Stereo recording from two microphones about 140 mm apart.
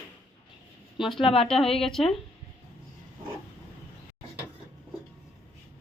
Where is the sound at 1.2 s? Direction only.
40° left (ahead or behind).